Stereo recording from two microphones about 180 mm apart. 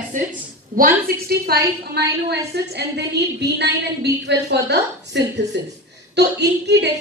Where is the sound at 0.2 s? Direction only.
45° right (ahead or behind); by 6.9 s 70° right (ahead or behind).